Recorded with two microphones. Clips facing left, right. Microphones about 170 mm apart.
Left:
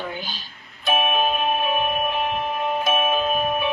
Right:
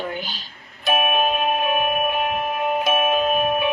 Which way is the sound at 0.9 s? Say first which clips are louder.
Right 1 dB; 15° right (ahead or behind).